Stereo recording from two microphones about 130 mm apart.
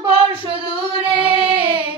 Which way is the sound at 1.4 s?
40° right (ahead or behind).